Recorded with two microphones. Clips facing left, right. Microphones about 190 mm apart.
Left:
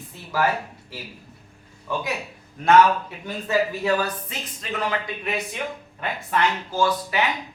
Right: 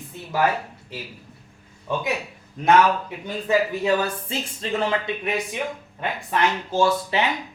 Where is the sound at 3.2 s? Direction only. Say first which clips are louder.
Right 2 dB; 20° right (ahead or behind).